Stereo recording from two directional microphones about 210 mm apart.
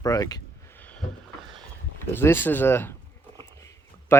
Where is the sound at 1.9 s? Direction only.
10° left (ahead or behind).